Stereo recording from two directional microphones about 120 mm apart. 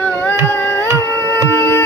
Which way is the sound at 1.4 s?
20° left (ahead or behind).